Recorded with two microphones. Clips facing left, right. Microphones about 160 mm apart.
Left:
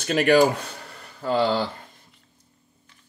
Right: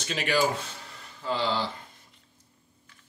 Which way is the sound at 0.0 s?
55° left (ahead or behind).